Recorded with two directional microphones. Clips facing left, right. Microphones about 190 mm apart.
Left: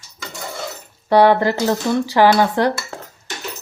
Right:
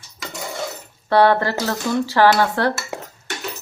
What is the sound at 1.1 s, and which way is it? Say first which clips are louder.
Speech: left 3 dB; 15° left (ahead or behind).